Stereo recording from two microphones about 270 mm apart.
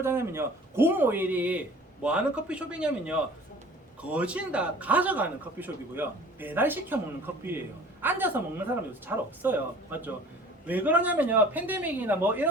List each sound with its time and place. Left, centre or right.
0.0 s speech: centre
8.0 s speech: centre